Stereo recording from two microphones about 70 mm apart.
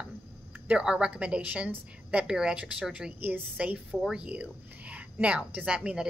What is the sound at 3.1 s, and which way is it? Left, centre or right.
Speech, right.